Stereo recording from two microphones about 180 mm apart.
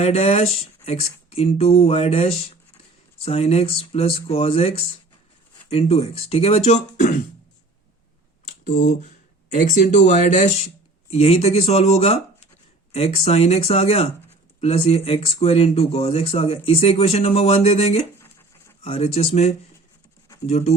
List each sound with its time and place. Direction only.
0.0 s speech: 35° left (ahead or behind)
8.6 s speech: 40° left (ahead or behind)